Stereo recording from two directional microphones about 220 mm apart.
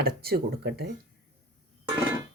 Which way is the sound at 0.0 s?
45° right (ahead or behind).